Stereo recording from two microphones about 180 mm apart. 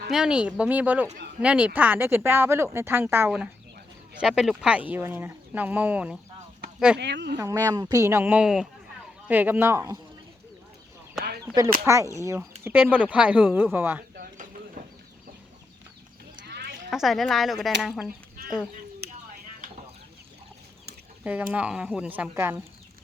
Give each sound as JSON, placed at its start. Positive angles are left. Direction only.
{"t": 0.1, "sound": "speech", "side_deg": -5}
{"t": 7.0, "sound": "speech", "side_deg": -75}
{"t": 7.3, "sound": "speech", "side_deg": -15}
{"t": 11.2, "sound": "a sound", "side_deg": 0}
{"t": 12.1, "sound": "speech", "side_deg": -15}
{"t": 16.5, "sound": "a sound", "side_deg": -65}
{"t": 16.9, "sound": "speech", "side_deg": 0}
{"t": 21.2, "sound": "speech", "side_deg": -10}